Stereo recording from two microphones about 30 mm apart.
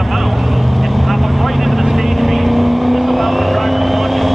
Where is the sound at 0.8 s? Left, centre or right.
Centre.